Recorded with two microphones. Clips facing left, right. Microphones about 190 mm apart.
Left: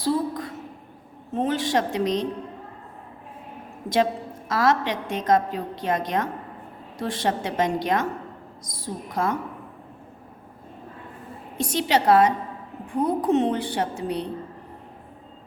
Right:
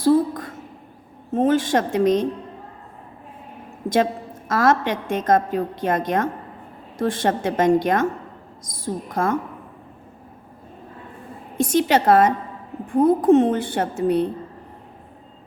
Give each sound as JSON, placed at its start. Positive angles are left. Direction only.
{"t": 0.0, "sound": "a sound", "side_deg": -50}
{"t": 1.3, "sound": "a woman's voice", "side_deg": -50}
{"t": 3.8, "sound": "a woman's voice", "side_deg": -50}
{"t": 11.5, "sound": "a woman's voice", "side_deg": -50}